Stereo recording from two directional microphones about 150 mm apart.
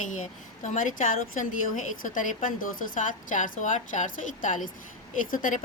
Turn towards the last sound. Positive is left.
turn(degrees=65)  # may be behind; listen again after turning